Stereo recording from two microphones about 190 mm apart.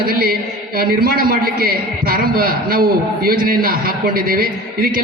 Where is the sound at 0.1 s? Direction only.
55° right (ahead or behind).